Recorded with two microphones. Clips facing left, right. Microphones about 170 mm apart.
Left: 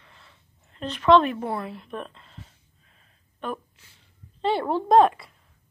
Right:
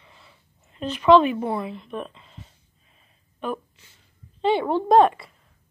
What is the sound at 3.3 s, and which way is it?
A woman's voice, 5° right (ahead or behind).